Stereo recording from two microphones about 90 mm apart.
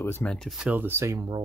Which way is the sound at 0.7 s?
25° right (ahead or behind).